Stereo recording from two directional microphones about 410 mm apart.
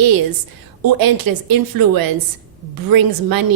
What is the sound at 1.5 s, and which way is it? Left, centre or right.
A woman's voice, right.